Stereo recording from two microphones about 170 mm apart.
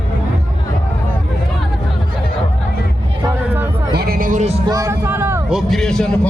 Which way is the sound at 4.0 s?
60° right (ahead or behind).